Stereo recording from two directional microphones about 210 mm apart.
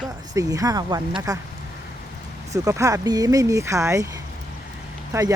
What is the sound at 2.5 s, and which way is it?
Speech, 15° right (ahead or behind).